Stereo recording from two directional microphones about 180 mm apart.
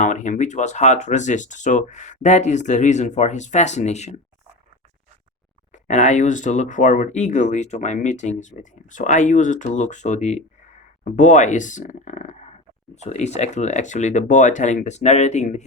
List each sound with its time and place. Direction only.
0.0 s speech: 40° left (ahead or behind)
5.7 s speech: 40° left (ahead or behind)